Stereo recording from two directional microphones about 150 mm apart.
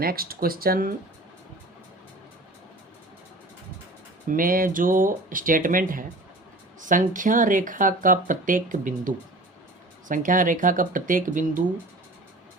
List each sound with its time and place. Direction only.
0.0 s speech: 85° right
4.3 s speech: 70° right (ahead or behind)